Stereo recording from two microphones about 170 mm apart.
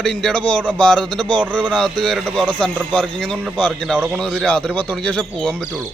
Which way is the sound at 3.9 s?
10° right (ahead or behind).